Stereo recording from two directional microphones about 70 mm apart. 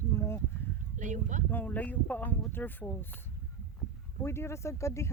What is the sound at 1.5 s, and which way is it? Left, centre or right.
Speech, left.